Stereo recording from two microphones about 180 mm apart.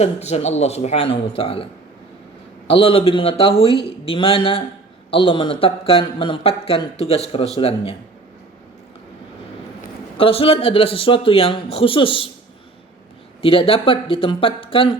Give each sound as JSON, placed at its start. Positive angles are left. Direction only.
{"t": 0.0, "sound": "speech", "side_deg": 35}
{"t": 2.6, "sound": "speech", "side_deg": 30}
{"t": 10.2, "sound": "speech", "side_deg": 30}
{"t": 13.4, "sound": "speech", "side_deg": 30}